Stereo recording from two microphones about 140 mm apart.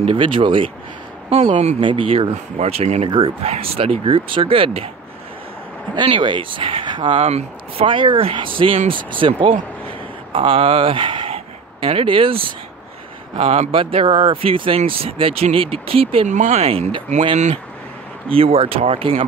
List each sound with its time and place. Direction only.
0.0 s speech: 40° right (ahead or behind)
1.3 s speech: 50° right (ahead or behind)
1.8 s speech: 35° right (ahead or behind)
5.9 s speech: 35° right (ahead or behind)
16.3 s speech: 60° right (ahead or behind)
16.6 s speech: 45° right (ahead or behind)